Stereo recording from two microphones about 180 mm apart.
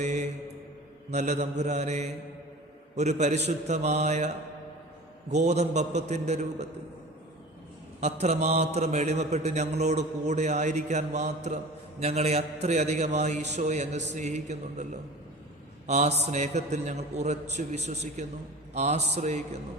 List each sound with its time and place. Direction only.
0.0 s a man's voice: 40° right (ahead or behind)
5.3 s a man's voice: 40° right (ahead or behind)
8.0 s a man's voice: 40° right (ahead or behind)
15.9 s a man's voice: 40° right (ahead or behind)